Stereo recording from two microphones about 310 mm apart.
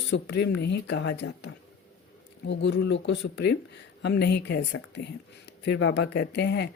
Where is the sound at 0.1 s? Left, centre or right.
Left.